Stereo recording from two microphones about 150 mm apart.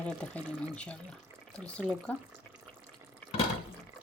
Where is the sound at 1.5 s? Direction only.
5° left (ahead or behind).